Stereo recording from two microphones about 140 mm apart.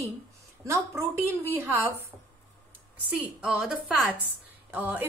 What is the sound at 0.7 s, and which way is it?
A woman's voice, 20° right (ahead or behind).